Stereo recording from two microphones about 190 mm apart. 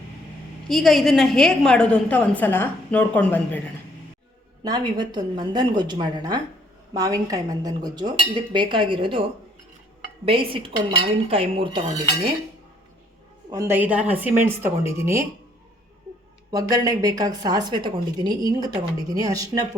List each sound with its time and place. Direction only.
0.7 s a woman's voice: centre (ahead or behind)
4.6 s a woman's voice: 20° right (ahead or behind)
10.2 s a woman's voice: 30° right (ahead or behind)
13.5 s speech: 15° right (ahead or behind)
16.5 s a woman's voice: 20° right (ahead or behind)